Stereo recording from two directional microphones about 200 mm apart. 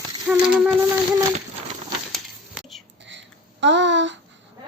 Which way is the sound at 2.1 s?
Centre (ahead or behind).